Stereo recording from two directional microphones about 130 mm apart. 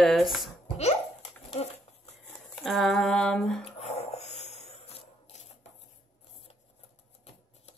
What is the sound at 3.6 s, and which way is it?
Music, 55° left (ahead or behind).